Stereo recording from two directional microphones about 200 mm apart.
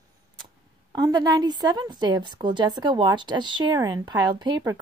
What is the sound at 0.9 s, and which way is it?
A woman's voice, 20° right (ahead or behind).